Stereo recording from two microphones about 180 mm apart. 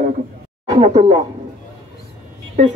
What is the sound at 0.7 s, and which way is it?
Speech, 35° right (ahead or behind).